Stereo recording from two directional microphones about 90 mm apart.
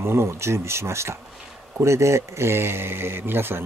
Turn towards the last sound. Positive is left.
turn(degrees=-25)  # may be behind; listen again after turning